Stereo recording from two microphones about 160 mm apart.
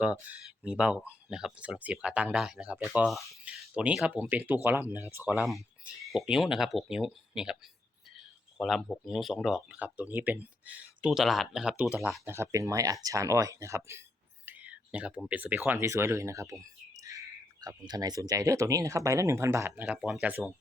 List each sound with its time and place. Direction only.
0.0 s speech: 10° right (ahead or behind)
12.2 s speech: 15° right (ahead or behind)